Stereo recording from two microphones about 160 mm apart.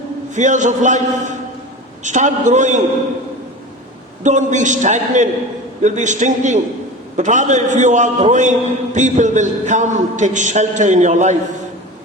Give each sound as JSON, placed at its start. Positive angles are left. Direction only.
{"t": 0.3, "sound": "a man's voice", "side_deg": -50}
{"t": 4.2, "sound": "a man's voice", "side_deg": -50}